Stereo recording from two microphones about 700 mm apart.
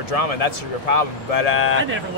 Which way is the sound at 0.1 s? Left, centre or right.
Left.